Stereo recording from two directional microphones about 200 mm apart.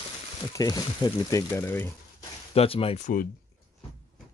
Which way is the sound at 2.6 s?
30° left (ahead or behind).